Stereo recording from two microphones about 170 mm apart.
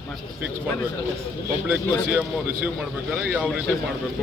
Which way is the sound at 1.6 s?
10° right (ahead or behind).